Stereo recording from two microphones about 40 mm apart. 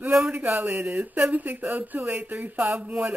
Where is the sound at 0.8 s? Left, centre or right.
Right.